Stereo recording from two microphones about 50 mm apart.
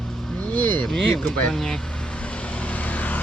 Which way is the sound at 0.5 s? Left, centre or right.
Left.